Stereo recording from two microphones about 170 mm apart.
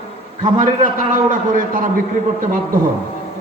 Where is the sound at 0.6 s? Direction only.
50° right (ahead or behind).